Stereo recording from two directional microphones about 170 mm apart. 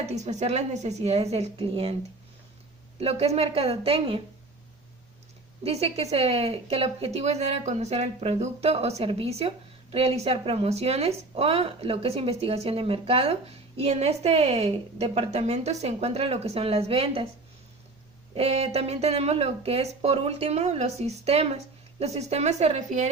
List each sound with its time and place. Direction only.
0.0 s speech: 40° right (ahead or behind)
3.0 s speech: 35° right (ahead or behind)
5.6 s speech: 35° right (ahead or behind)
18.3 s speech: 35° right (ahead or behind)